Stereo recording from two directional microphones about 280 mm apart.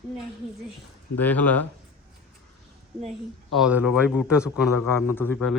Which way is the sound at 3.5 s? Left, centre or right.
Centre.